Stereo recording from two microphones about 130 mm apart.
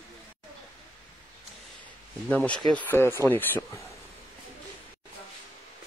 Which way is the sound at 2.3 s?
10° left (ahead or behind).